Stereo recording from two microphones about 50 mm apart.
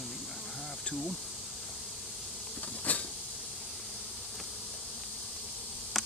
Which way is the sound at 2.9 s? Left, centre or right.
Left.